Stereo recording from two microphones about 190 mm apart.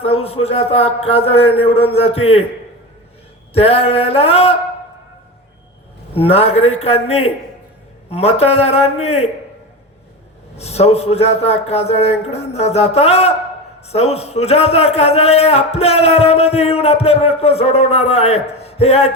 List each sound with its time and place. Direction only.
0.0 s speech: 30° left (ahead or behind)
3.5 s speech: 30° left (ahead or behind)
6.1 s speech: 30° left (ahead or behind)
10.6 s speech: 35° left (ahead or behind)